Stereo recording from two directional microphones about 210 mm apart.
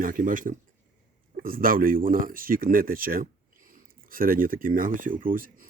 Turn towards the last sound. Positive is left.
turn(degrees=-40)  # may be behind; listen again after turning